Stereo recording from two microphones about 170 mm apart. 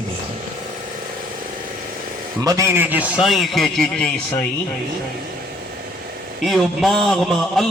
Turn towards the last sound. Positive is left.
turn(degrees=0)  # may be behind; listen again after turning